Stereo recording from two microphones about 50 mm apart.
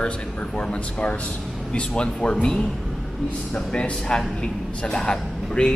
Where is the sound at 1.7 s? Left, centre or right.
Left.